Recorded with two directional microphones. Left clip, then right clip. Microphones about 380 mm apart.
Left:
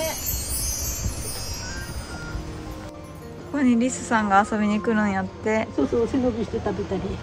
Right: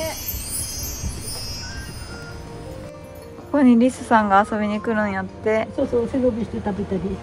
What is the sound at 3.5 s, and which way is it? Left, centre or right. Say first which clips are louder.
A woman's voice: right 6 dB; centre.